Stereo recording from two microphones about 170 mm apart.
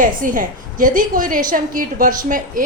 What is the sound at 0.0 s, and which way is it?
A woman's voice, 55° right (ahead or behind).